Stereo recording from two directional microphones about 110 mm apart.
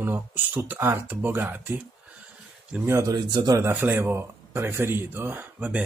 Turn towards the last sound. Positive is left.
turn(degrees=-15)  # may be behind; listen again after turning